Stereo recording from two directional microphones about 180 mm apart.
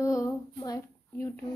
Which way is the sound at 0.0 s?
15° left (ahead or behind).